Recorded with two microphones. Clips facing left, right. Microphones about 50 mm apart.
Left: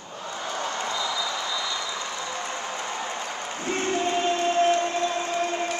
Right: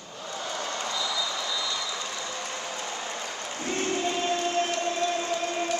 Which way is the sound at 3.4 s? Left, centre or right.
Left.